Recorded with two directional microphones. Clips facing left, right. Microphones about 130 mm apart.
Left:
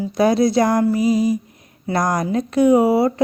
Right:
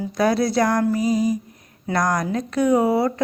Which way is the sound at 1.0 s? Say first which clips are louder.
Left 3 dB; 40° right (ahead or behind).